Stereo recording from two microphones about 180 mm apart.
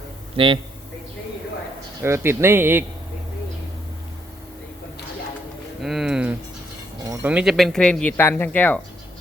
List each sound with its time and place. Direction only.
0.3 s a man's voice: 30° right (ahead or behind)
2.0 s speech: 15° right (ahead or behind)
5.8 s speech: centre (ahead or behind)